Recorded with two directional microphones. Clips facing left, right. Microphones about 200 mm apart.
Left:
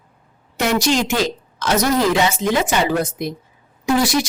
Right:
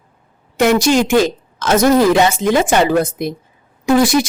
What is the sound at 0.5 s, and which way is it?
A woman's voice, 55° right (ahead or behind).